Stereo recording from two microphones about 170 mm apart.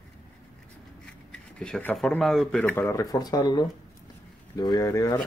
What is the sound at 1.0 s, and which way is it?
Speech, 5° left (ahead or behind).